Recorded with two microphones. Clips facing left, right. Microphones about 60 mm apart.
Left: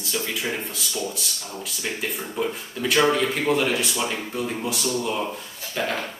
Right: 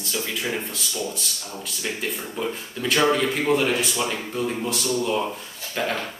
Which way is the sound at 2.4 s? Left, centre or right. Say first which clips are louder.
Left 2 dB; centre.